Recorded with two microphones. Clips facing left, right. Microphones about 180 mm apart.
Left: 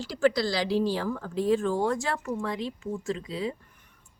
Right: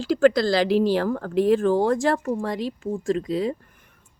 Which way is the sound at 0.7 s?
90° right.